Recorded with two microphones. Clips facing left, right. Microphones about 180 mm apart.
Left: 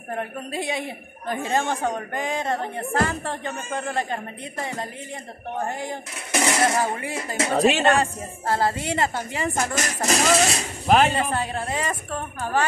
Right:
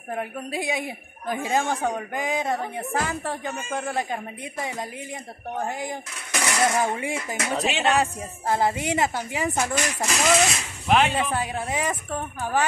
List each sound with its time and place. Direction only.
0.1 s a woman's voice: 10° right (ahead or behind)
6.3 s coin: 20° left (ahead or behind)
6.8 s a woman's voice: 15° right (ahead or behind)
7.3 s speech: 35° left (ahead or behind)
8.0 s a woman's voice: 15° right (ahead or behind)
9.8 s speech: 40° left (ahead or behind)
11.1 s a woman's voice: 10° right (ahead or behind)